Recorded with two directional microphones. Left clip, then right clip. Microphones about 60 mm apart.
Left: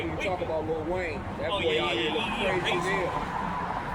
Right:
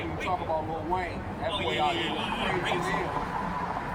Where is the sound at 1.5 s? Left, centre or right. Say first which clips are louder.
Left 1 dB; right.